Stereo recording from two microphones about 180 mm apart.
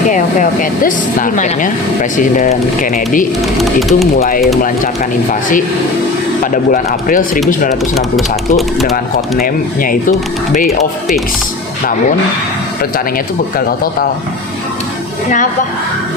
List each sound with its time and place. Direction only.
0.1 s speech: 45° left (ahead or behind)
3.6 s speech: centre (ahead or behind)
5.3 s speech: 50° left (ahead or behind)
8.5 s speech: centre (ahead or behind)
9.4 s speech: 50° left (ahead or behind)